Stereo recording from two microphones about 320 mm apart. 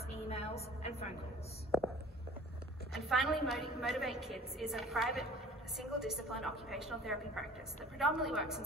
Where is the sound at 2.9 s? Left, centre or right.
Centre.